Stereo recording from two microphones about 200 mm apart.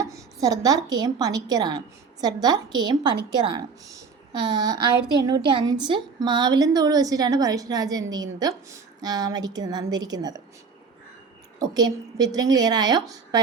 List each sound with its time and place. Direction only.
0.0 s a woman's voice: 15° right (ahead or behind)
11.6 s a woman's voice: 20° right (ahead or behind)